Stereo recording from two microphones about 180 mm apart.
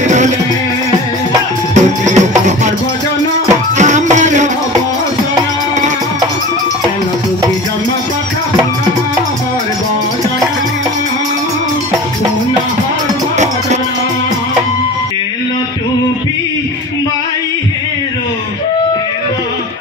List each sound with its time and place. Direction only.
1.8 s music: 40° right (ahead or behind)
3.7 s music: 40° right (ahead or behind)